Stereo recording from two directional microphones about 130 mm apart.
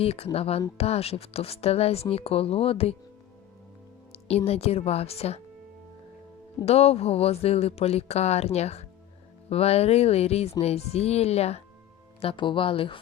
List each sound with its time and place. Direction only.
0.0 s speech: 50° left (ahead or behind)
4.1 s speech: 50° left (ahead or behind)
6.7 s speech: 55° left (ahead or behind)
12.2 s speech: 40° left (ahead or behind)